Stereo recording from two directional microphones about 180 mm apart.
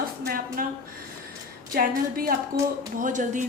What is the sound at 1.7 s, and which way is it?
A woman's voice, 55° right (ahead or behind).